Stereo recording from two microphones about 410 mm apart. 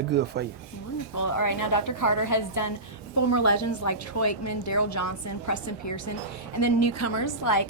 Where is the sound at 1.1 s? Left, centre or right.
Left.